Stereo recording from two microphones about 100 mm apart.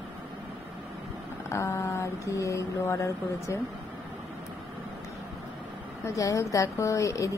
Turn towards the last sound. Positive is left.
turn(degrees=30)  # may be behind; listen again after turning